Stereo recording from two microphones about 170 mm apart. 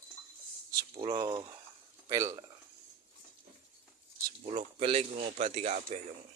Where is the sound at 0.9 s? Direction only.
30° right (ahead or behind).